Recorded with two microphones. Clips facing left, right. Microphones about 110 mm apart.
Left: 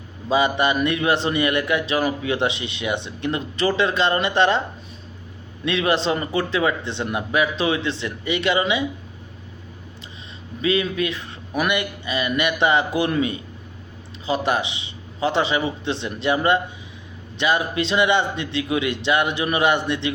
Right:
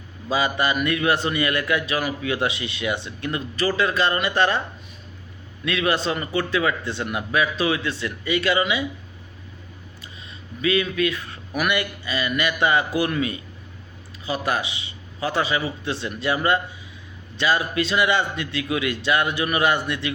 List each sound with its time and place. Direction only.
0.3 s a man's voice: 25° left (ahead or behind)
5.6 s a man's voice: 25° left (ahead or behind)
10.6 s a man's voice: 25° left (ahead or behind)